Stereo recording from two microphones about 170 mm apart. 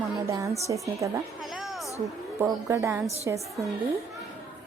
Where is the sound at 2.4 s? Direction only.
15° right (ahead or behind).